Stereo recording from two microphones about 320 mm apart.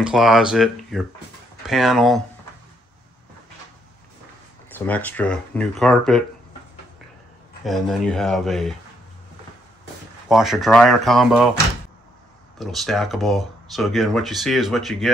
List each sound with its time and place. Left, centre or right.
0.0 s speech: centre
4.6 s speech: centre
7.6 s speech: centre
10.2 s speech: centre
12.5 s speech: centre